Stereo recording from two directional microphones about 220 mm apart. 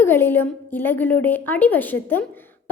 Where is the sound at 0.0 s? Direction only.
10° left (ahead or behind).